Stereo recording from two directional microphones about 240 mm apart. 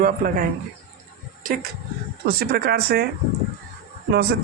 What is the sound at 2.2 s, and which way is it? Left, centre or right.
Speech, right.